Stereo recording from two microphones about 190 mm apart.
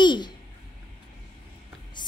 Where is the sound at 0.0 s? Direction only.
25° left (ahead or behind).